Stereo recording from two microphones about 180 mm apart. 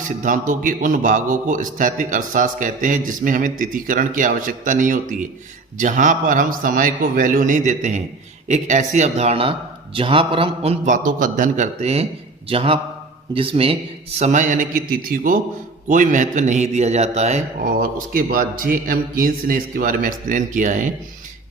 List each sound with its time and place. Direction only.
0.2 s a man's voice: 45° right (ahead or behind); by 13.7 s 30° right (ahead or behind)
14.2 s a man's voice: 40° right (ahead or behind)
17.7 s a man's voice: 55° right (ahead or behind)